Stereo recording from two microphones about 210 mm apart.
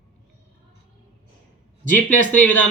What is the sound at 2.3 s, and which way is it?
Speech, 5° left (ahead or behind).